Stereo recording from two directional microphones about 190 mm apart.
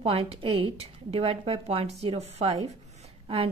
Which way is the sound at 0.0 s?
30° right (ahead or behind).